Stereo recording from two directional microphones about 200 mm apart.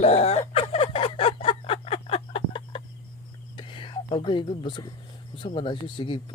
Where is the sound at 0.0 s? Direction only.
30° left (ahead or behind).